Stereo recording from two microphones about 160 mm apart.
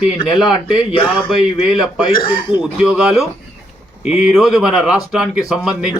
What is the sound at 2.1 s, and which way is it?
Speech, 30° left (ahead or behind).